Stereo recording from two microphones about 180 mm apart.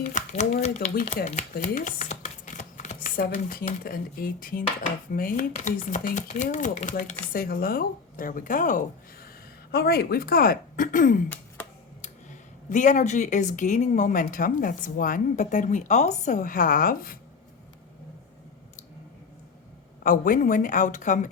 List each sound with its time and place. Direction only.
0.0 s speech: 40° left (ahead or behind)
1.5 s a sound: 45° left (ahead or behind)
3.5 s speech: 55° left (ahead or behind)
9.7 s a woman's voice: 60° left (ahead or behind)
12.7 s speech: 45° left (ahead or behind)
20.1 s speech: 50° left (ahead or behind)